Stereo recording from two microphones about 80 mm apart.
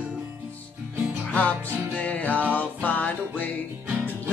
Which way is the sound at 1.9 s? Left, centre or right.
Centre.